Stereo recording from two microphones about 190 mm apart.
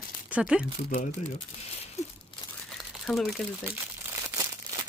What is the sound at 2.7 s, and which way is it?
Crumpling, centre (ahead or behind).